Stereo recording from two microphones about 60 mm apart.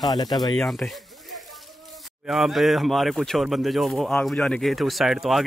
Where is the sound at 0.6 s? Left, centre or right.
Centre.